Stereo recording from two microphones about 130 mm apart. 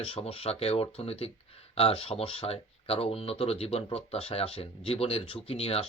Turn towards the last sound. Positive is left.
turn(degrees=50)  # may be behind; listen again after turning